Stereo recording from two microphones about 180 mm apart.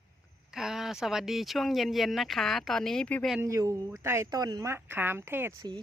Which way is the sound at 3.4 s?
15° right (ahead or behind).